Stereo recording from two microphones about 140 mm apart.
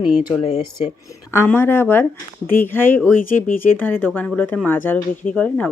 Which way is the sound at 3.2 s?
75° left (ahead or behind).